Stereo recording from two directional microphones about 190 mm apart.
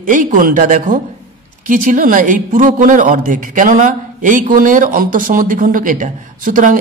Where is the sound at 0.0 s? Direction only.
45° right (ahead or behind).